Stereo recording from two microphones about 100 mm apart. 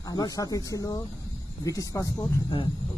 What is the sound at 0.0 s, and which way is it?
Speech, 40° left (ahead or behind).